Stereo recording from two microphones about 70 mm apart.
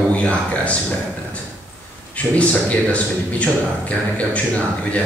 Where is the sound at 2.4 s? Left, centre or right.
Centre.